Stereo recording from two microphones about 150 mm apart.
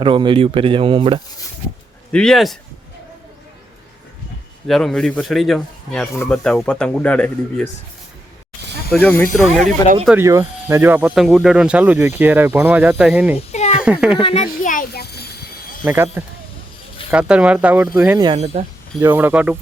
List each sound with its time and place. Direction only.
0.0 s speech: 35° right (ahead or behind)
2.1 s a man's voice: centre (ahead or behind)
4.7 s a man's voice: 5° left (ahead or behind)
8.9 s a man's voice: 10° left (ahead or behind)
10.2 s speech: 20° right (ahead or behind)
13.5 s a sound: 50° left (ahead or behind)
13.8 s speech: 5° right (ahead or behind)
14.2 s a child's voice: 40° left (ahead or behind)
14.6 s a sound: 60° left (ahead or behind); by 15.5 s 90° left
15.9 s speech: 15° right (ahead or behind)
18.3 s speech: 45° right (ahead or behind)
18.9 s speech: 10° right (ahead or behind)